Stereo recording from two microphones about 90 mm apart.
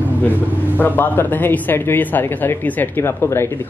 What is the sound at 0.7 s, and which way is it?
A man's voice, 20° left (ahead or behind).